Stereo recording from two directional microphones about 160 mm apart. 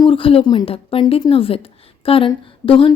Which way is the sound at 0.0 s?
35° left (ahead or behind).